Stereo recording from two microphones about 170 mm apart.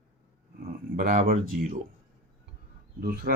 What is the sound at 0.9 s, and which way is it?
Speech, 50° right (ahead or behind).